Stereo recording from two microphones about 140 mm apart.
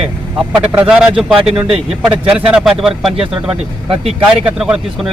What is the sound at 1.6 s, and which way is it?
Speech, 40° right (ahead or behind).